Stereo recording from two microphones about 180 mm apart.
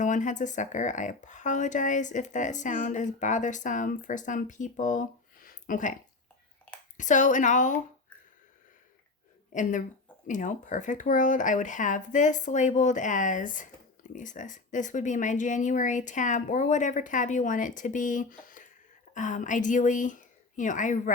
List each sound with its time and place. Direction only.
0.0 s speech: 45° left (ahead or behind)
9.5 s speech: 45° left (ahead or behind)